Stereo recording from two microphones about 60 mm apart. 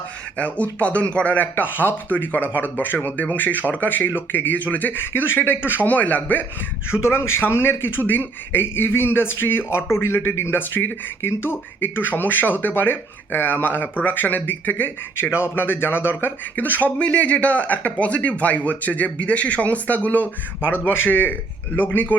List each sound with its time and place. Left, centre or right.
0.3 s a man's voice: left
7.0 s speech: left
16.6 s a man's voice: left